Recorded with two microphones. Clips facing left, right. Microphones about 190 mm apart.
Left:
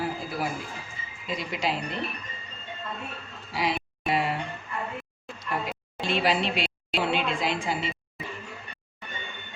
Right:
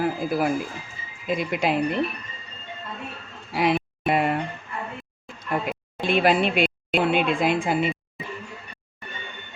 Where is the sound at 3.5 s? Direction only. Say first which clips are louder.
Right 6 dB; 55° right (ahead or behind).